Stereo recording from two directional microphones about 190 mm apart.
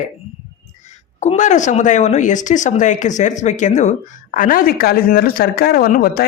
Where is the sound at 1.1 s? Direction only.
40° left (ahead or behind).